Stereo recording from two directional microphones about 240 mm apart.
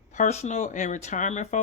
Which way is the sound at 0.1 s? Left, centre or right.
Left.